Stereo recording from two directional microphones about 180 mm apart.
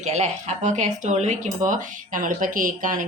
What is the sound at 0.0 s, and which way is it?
Speech, 40° right (ahead or behind).